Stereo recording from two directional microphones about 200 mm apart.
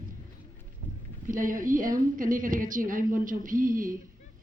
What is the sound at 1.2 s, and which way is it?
A woman's voice, 40° right (ahead or behind).